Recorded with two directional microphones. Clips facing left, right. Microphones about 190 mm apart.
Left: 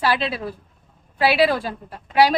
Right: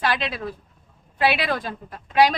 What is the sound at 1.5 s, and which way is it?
Speech, 10° left (ahead or behind).